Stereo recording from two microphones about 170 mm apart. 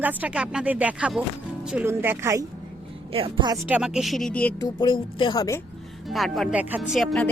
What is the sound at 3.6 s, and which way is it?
Speech, 5° right (ahead or behind).